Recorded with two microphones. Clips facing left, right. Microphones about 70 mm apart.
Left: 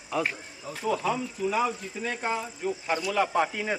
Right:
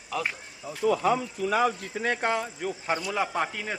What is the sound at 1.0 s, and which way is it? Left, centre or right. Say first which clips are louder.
Speech: right 3 dB; right.